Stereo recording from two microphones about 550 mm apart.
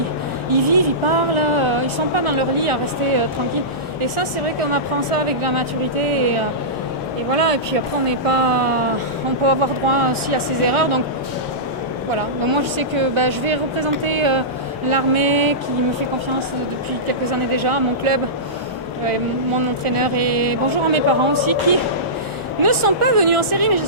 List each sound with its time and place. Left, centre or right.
0.5 s speech: right
4.7 s speech: right
7.3 s speech: right
12.5 s speech: right
17.6 s speech: right
19.8 s speech: right
22.6 s speech: right